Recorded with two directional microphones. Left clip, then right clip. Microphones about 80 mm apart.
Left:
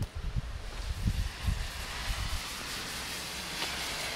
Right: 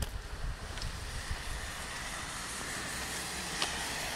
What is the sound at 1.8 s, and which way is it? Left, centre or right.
Vehicle, centre.